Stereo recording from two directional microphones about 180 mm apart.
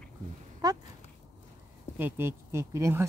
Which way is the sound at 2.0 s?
15° right (ahead or behind).